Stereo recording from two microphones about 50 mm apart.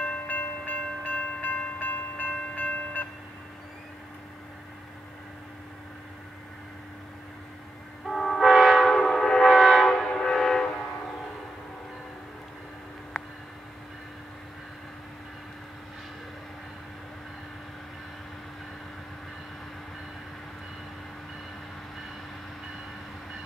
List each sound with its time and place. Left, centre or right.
0.3 s train: left
8.0 s train: centre
8.4 s train: centre
8.8 s train: centre
9.5 s train: centre
9.8 s train: centre